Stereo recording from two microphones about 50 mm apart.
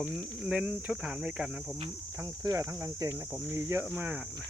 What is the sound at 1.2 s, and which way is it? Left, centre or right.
Speech, right.